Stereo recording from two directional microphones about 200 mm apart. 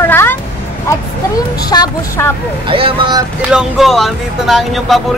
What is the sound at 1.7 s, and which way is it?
Speech, 15° left (ahead or behind).